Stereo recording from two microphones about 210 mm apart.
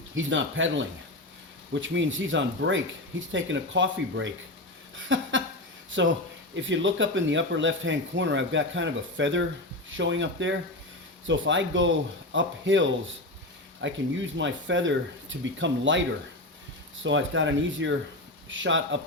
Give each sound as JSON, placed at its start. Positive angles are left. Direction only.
{"t": 0.1, "sound": "speech", "side_deg": -65}
{"t": 17.0, "sound": "speech", "side_deg": -65}